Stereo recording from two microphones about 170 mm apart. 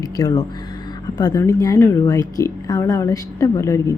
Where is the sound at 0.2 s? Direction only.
20° left (ahead or behind).